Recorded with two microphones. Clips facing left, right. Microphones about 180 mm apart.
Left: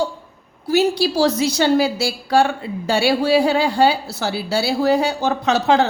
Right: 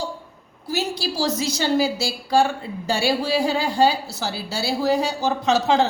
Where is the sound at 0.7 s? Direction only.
65° left (ahead or behind).